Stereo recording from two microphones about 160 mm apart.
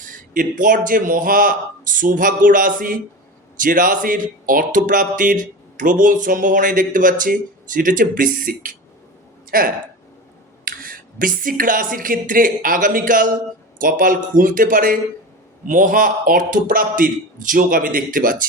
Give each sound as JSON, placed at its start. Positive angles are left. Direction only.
{"t": 0.0, "sound": "speech", "side_deg": -60}